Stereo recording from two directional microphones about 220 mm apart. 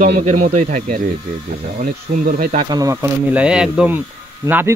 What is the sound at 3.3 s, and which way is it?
Speech, 5° right (ahead or behind).